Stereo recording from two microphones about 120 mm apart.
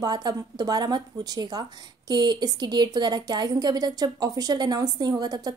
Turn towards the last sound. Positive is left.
turn(degrees=-35)  # may be behind; listen again after turning